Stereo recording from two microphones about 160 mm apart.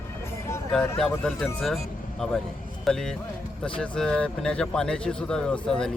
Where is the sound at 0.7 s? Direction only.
5° left (ahead or behind).